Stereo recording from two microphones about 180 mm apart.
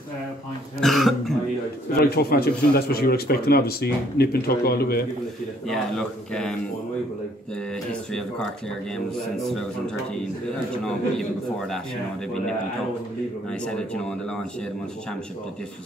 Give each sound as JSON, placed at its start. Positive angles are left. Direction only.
{"t": 0.7, "sound": "speech", "side_deg": 0}
{"t": 2.0, "sound": "speech", "side_deg": 60}
{"t": 5.7, "sound": "speech", "side_deg": 5}
{"t": 7.9, "sound": "speech", "side_deg": 5}
{"t": 13.5, "sound": "speech", "side_deg": 5}